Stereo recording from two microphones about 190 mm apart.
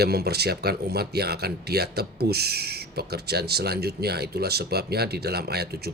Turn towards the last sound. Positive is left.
turn(degrees=-55)  # may be behind; listen again after turning